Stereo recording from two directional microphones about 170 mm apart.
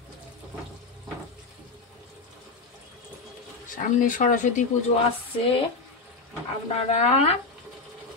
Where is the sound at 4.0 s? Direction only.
50° left (ahead or behind).